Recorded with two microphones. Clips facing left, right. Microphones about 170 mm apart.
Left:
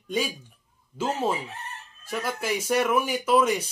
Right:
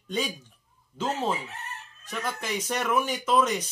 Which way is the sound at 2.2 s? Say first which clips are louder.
Left 2 dB; 10° left (ahead or behind).